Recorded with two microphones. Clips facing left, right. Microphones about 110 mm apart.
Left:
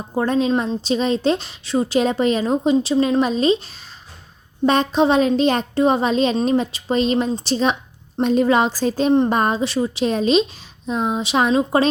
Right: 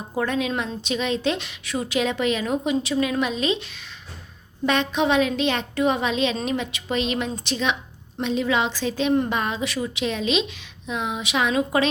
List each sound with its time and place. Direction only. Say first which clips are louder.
0.1 s a woman's voice: left 6 dB; 30° left (ahead or behind)